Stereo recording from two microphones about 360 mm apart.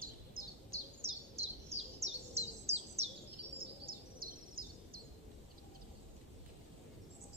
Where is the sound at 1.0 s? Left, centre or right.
Centre.